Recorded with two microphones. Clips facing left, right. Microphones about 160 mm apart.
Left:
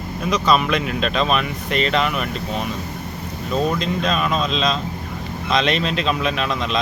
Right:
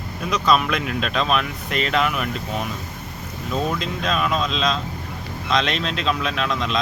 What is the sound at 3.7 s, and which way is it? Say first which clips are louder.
Speech: left 3 dB; centre (ahead or behind).